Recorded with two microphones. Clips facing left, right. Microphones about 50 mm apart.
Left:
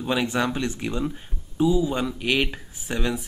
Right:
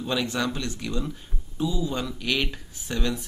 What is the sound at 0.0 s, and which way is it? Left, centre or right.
Speech, left.